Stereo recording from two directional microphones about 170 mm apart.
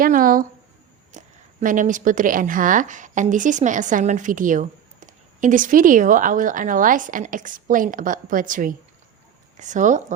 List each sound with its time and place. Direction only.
0.0 s speech: 55° right (ahead or behind)
1.1 s a sound: 45° right (ahead or behind)
1.6 s a woman's voice: 50° right (ahead or behind)